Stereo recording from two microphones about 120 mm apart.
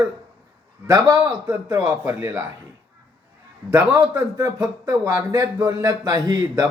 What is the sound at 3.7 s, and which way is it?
Speech, 25° right (ahead or behind).